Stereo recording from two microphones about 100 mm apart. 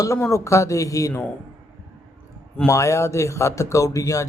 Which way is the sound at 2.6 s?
30° left (ahead or behind).